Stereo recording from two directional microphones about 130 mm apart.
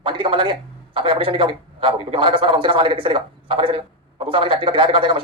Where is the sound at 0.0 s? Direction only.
40° right (ahead or behind).